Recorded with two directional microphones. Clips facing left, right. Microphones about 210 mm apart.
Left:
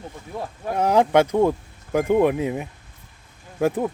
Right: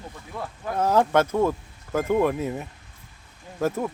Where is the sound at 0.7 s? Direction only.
15° left (ahead or behind).